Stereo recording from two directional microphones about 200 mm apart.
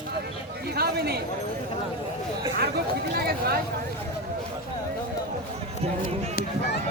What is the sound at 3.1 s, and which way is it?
Speech, 50° right (ahead or behind).